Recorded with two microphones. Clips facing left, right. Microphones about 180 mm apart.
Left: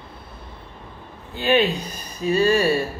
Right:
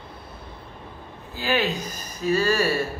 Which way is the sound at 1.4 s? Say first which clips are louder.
Left 5 dB; 25° left (ahead or behind).